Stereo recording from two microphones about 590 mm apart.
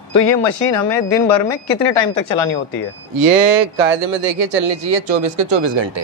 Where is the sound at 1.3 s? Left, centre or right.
Left.